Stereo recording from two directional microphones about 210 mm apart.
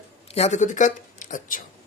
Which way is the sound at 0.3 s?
35° left (ahead or behind).